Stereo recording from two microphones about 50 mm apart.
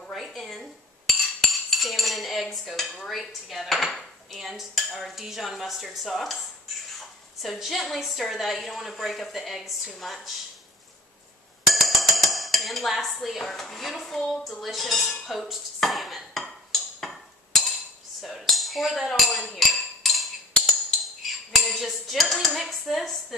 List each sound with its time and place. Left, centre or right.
0.0 s cutlery: centre
3.1 s dishes: centre
11.7 s speech: centre
14.6 s dishes: centre
18.2 s dishes: centre
19.5 s a sound: centre
21.5 s speech: centre